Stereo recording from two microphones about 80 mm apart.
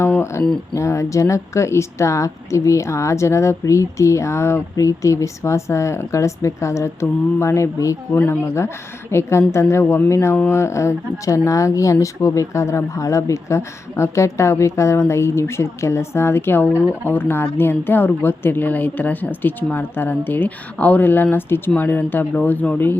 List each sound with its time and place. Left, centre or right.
0.0 s speech: left; by 22.9 s centre